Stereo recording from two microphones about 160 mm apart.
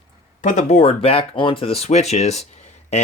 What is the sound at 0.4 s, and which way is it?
Speech, 50° left (ahead or behind).